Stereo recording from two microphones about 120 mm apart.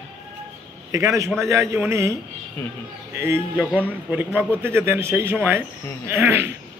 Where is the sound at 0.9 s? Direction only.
25° right (ahead or behind).